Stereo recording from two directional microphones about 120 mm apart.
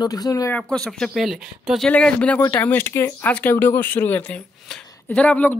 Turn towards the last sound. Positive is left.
turn(degrees=15)  # may be behind; listen again after turning